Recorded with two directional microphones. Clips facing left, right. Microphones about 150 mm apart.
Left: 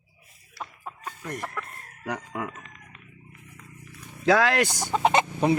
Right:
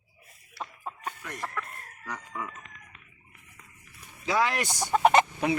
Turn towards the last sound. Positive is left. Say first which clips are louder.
# right 1 dB
turn(degrees=25)  # may be behind; listen again after turning